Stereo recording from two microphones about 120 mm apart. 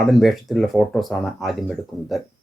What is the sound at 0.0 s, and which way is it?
Speech, centre (ahead or behind).